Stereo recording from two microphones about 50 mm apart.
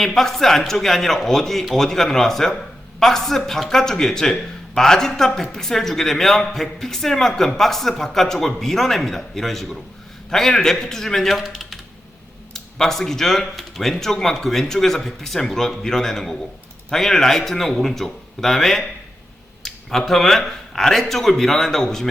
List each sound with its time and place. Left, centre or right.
0.0 s speech: centre
11.3 s typing: centre
12.5 s speech: centre